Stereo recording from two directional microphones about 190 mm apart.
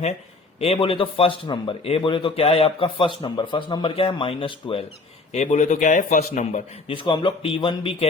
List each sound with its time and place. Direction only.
0.6 s a man's voice: 30° left (ahead or behind)
5.3 s a man's voice: 35° left (ahead or behind)